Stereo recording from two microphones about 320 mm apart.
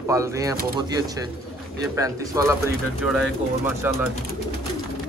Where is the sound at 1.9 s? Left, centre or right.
Centre.